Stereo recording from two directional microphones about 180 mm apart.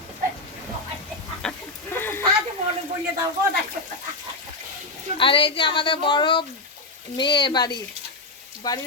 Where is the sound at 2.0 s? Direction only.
10° left (ahead or behind).